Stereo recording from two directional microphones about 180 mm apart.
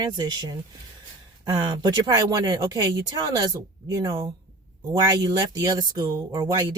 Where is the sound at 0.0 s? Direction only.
25° right (ahead or behind).